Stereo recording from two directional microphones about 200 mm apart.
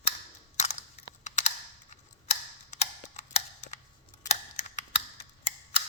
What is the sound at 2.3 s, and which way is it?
Tick-tock, 35° left (ahead or behind).